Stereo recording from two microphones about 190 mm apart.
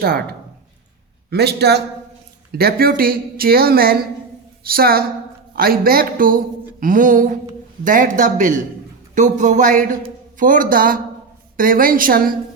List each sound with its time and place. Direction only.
1.3 s a man's voice: 60° right (ahead or behind)